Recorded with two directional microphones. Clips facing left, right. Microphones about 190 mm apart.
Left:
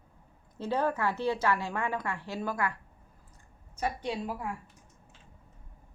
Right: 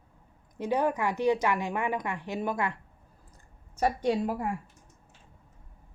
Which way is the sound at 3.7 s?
45° right (ahead or behind).